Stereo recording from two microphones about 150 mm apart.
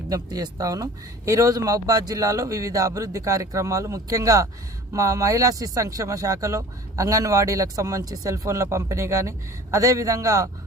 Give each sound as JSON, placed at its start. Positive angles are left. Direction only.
{"t": 0.1, "sound": "speech", "side_deg": -25}